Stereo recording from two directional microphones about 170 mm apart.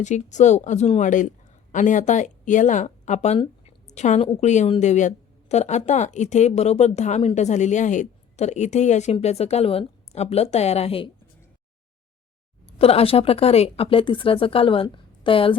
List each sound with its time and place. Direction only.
0.0 s speech: 45° left (ahead or behind)
3.4 s a sound: 40° left (ahead or behind)
4.3 s speech: 40° left (ahead or behind)
12.6 s speech: 35° left (ahead or behind)